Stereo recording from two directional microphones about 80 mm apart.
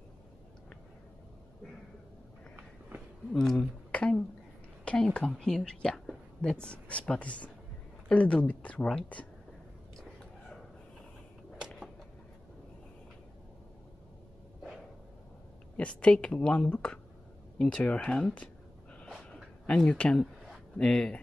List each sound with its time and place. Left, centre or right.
3.3 s speech: centre
15.8 s speech: centre
19.3 s a sound: centre
20.7 s speech: centre